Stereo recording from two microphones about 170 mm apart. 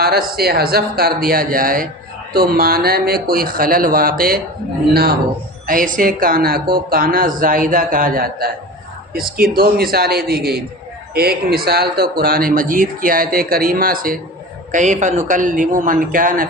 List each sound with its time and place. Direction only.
0.0 s speech: 65° right (ahead or behind)
5.6 s speech: 50° right (ahead or behind)
9.6 s speech: 65° right (ahead or behind)
14.7 s a man's voice: 45° right (ahead or behind)